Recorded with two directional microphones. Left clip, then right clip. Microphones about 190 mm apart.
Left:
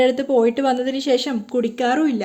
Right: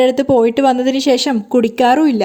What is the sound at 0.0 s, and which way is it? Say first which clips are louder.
Speech: right 5 dB; 40° right (ahead or behind).